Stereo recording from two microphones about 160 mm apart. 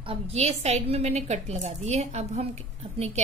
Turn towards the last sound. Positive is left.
turn(degrees=-45)  # may be behind; listen again after turning